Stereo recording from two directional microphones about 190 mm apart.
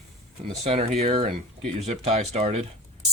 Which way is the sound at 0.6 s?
35° right (ahead or behind).